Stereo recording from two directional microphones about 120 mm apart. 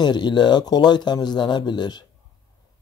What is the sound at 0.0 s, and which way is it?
Speech, 40° left (ahead or behind).